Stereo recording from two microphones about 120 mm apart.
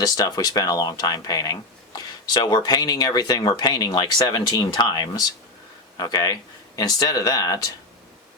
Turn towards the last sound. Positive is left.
turn(degrees=30)  # may be behind; listen again after turning